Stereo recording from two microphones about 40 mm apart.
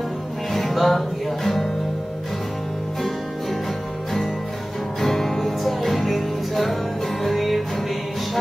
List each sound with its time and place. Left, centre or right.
0.5 s music: centre
5.0 s music: centre